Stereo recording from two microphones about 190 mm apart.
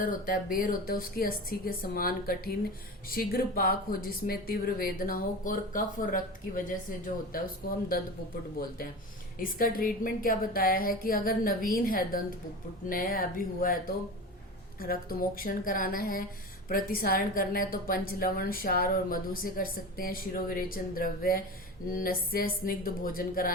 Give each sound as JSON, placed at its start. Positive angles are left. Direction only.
{"t": 0.0, "sound": "a woman's voice", "side_deg": 45}
{"t": 9.4, "sound": "a woman's voice", "side_deg": 50}